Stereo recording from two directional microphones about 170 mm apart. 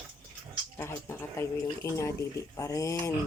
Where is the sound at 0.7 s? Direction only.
15° left (ahead or behind).